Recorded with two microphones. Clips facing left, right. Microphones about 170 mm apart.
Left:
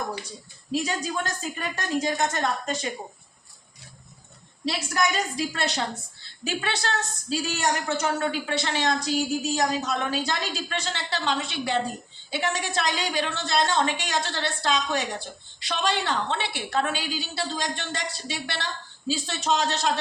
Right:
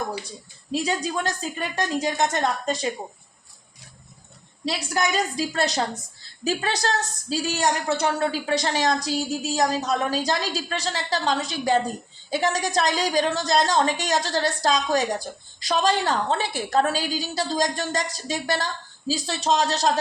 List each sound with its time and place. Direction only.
0.7 s a woman's voice: 35° right (ahead or behind)
4.6 s a woman's voice: 35° right (ahead or behind)